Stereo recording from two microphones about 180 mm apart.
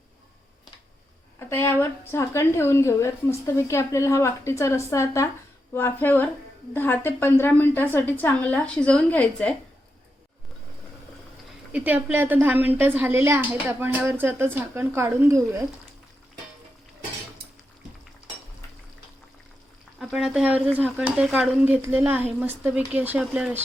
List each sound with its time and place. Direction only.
1.4 s a woman's voice: 15° left (ahead or behind)
11.7 s a woman's voice: 10° right (ahead or behind)
20.0 s a woman's voice: 5° right (ahead or behind)